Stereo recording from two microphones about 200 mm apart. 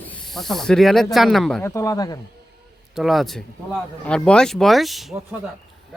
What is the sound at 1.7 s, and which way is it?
Speech, 15° left (ahead or behind).